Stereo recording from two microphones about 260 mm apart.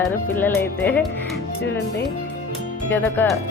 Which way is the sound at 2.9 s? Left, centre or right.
Centre.